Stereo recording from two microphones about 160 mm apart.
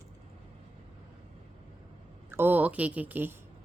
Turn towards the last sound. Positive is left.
turn(degrees=-10)  # may be behind; listen again after turning